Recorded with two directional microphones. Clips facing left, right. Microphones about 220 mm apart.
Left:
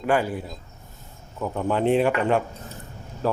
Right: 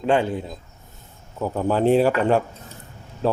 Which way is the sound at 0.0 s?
25° right (ahead or behind).